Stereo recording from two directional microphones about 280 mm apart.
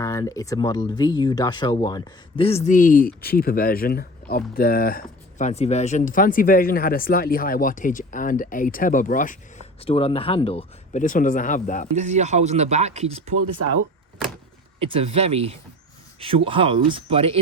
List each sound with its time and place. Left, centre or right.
0.0 s speech: centre; by 11.9 s left
11.9 s speech: right
14.8 s speech: centre